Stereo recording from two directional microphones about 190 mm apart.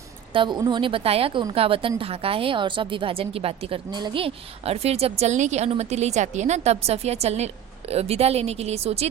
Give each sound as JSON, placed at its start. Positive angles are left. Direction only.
{"t": 0.3, "sound": "a woman's voice", "side_deg": -25}